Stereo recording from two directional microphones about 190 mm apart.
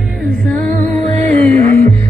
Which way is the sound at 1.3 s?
10° left (ahead or behind).